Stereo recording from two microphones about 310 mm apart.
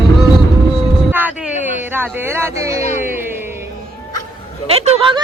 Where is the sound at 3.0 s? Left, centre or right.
Centre.